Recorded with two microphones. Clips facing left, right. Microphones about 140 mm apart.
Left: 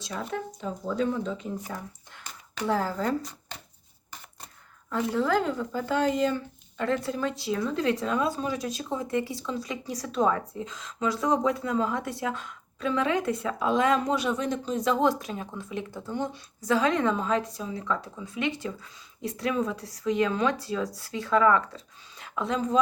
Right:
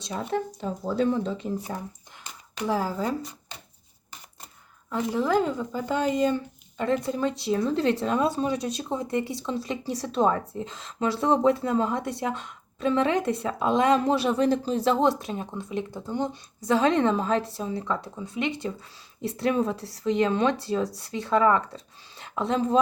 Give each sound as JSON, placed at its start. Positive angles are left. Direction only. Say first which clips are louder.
{"t": 0.1, "sound": "speech", "louder": "right 4 dB", "side_deg": -30}
{"t": 2.6, "sound": "speech", "louder": "right 1 dB", "side_deg": -10}
{"t": 4.9, "sound": "speech", "louder": "right 1 dB", "side_deg": -15}